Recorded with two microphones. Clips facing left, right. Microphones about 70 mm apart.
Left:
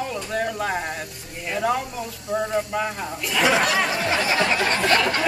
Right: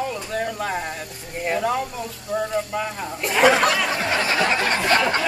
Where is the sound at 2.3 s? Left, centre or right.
Centre.